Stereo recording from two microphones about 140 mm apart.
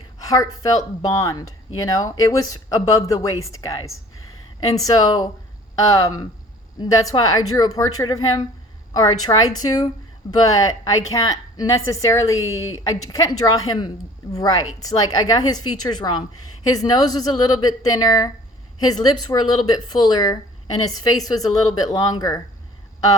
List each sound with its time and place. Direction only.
0.2 s speech: 25° left (ahead or behind)